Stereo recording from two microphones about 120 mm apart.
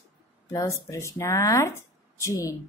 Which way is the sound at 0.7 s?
25° left (ahead or behind).